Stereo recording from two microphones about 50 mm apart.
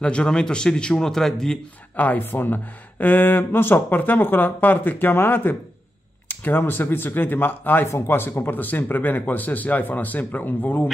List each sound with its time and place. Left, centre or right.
0.0 s a man's voice: centre
2.0 s speech: left